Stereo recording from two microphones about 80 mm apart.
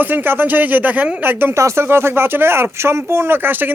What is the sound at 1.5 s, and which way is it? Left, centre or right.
Speech, right.